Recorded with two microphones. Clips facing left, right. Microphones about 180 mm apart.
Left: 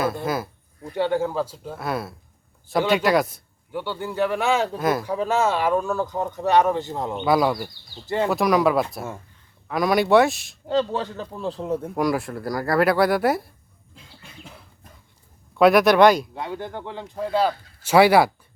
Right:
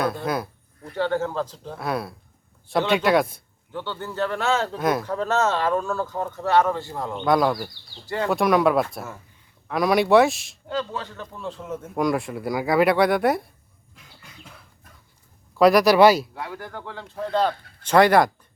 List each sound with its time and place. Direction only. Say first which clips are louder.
0.0 s speech: even; centre (ahead or behind)
0.8 s speech: left 2 dB; 15° left (ahead or behind)
3.7 s speech: left 3 dB; 10° left (ahead or behind)
4.8 s speech: left 1 dB; centre (ahead or behind); by 7.2 s 20° left (ahead or behind)
7.2 s speech: even; 5° left (ahead or behind)
8.0 s speech: left 3 dB; 20° left (ahead or behind)
8.3 s speech: right 1 dB; centre (ahead or behind)
10.7 s a man's voice: left 6 dB; 30° left (ahead or behind)
11.9 s speech: right 3 dB; centre (ahead or behind)
13.9 s bird: left 3 dB; 30° left (ahead or behind)
15.5 s speech: even; centre (ahead or behind)
16.3 s speech: left 4 dB; 25° left (ahead or behind); by 18.3 s 5° left (ahead or behind)